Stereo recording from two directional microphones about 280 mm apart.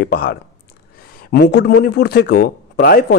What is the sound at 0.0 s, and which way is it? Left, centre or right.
Speech, left.